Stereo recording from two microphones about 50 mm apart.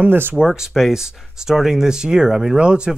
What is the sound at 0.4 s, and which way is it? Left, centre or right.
Speech, centre.